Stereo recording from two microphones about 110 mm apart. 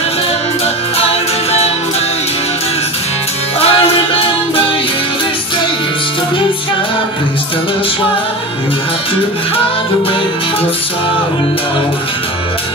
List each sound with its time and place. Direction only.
3.5 s music: 65° left (ahead or behind)